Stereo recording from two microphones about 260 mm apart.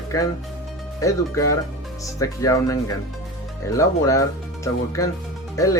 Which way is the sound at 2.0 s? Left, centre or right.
Centre.